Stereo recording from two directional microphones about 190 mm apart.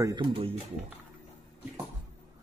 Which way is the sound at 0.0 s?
25° right (ahead or behind).